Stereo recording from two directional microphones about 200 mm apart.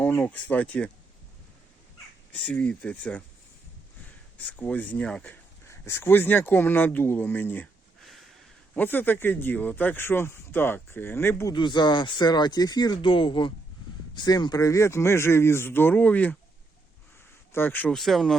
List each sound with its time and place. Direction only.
0.0 s speech: 10° left (ahead or behind)
2.3 s speech: 5° left (ahead or behind)
4.4 s speech: 10° left (ahead or behind)
11.5 s speech: 20° left (ahead or behind)
17.5 s speech: 10° left (ahead or behind)